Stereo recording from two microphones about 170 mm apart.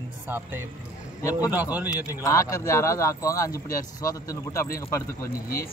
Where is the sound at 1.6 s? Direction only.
10° right (ahead or behind).